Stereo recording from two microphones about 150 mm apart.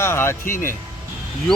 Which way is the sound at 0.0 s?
15° left (ahead or behind).